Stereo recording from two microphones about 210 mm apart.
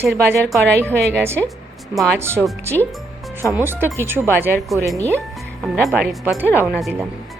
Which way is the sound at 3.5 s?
10° right (ahead or behind).